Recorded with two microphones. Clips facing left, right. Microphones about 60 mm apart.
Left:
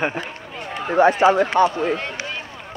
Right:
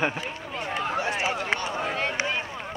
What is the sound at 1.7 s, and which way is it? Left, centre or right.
Speech, centre.